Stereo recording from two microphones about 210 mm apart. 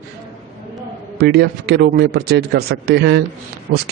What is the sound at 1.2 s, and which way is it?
Speech, 50° right (ahead or behind).